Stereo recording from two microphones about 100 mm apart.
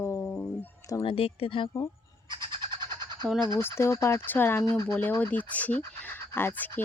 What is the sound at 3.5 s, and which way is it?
Speech, 25° left (ahead or behind).